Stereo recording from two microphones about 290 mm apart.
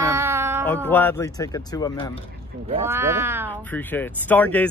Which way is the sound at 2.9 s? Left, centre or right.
Centre.